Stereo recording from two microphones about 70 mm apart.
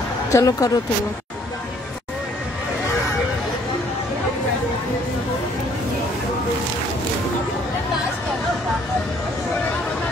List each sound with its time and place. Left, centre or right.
0.3 s speech: left